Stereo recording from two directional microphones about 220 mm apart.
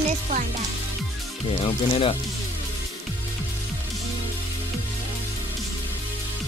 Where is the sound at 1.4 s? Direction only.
25° left (ahead or behind).